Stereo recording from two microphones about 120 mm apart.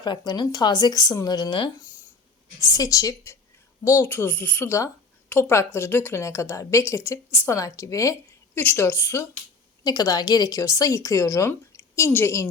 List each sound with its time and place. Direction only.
0.0 s speech: 35° left (ahead or behind)
2.6 s a woman's voice: 30° left (ahead or behind)
9.8 s a woman's voice: 35° left (ahead or behind)